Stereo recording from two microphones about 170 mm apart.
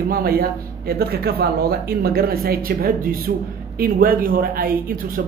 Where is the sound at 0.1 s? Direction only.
60° right (ahead or behind).